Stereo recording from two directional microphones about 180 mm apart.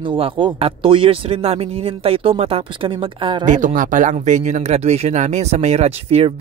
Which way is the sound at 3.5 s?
45° right (ahead or behind).